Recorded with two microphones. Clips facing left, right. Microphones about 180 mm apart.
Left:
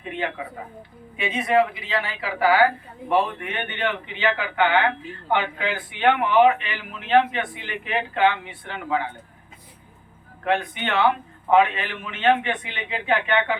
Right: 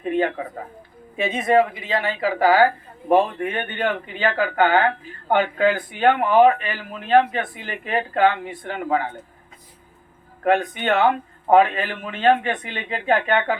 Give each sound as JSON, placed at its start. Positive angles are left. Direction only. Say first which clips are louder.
{"t": 0.0, "sound": "a sound", "louder": "right 7 dB", "side_deg": -45}
{"t": 1.1, "sound": "a man's voice", "louder": "right 3 dB", "side_deg": -45}
{"t": 10.4, "sound": "a man's voice", "louder": "right 5 dB", "side_deg": -45}